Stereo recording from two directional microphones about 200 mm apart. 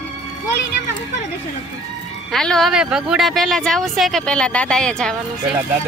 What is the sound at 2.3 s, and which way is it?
Speech, centre (ahead or behind).